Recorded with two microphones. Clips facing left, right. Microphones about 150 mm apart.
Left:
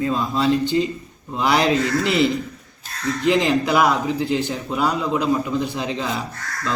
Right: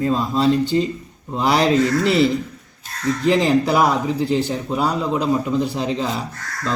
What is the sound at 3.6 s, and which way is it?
A man's voice, 35° right (ahead or behind).